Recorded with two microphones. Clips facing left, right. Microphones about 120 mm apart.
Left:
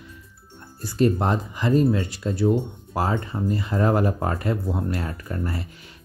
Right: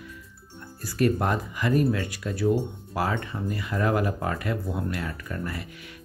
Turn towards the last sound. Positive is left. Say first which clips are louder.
# left 4 dB
turn(degrees=30)  # may be behind; listen again after turning